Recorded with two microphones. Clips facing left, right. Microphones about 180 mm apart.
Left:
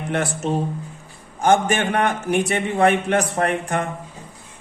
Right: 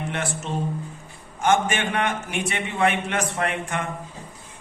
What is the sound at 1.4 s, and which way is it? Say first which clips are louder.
A man's voice: left 4 dB; 40° left (ahead or behind).